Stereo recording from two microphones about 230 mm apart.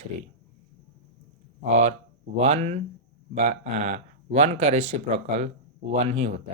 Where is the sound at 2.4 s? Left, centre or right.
Right.